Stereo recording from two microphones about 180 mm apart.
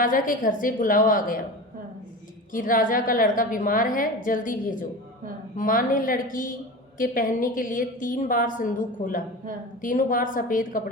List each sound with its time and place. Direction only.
0.0 s a woman's voice: 50° left (ahead or behind)
2.5 s a woman's voice: 50° left (ahead or behind)